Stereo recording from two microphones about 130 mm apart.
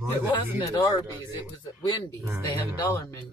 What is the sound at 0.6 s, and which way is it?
Speech, 30° left (ahead or behind).